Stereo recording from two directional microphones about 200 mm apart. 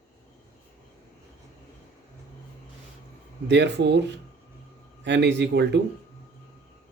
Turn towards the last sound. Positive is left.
turn(degrees=-60)  # may be behind; listen again after turning